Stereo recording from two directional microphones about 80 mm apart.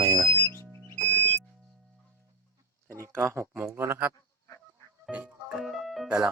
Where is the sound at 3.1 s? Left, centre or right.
Right.